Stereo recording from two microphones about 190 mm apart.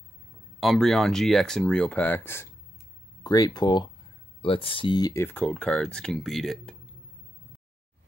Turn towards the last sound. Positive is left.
turn(degrees=0)  # may be behind; listen again after turning